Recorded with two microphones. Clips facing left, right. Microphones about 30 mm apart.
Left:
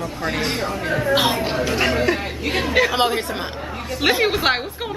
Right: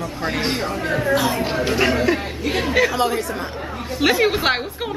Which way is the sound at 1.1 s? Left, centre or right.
Left.